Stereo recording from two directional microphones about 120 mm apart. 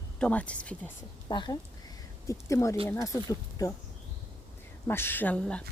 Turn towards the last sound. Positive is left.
turn(degrees=10)  # may be behind; listen again after turning